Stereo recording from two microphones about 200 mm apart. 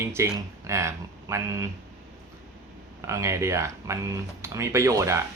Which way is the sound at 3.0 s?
15° right (ahead or behind).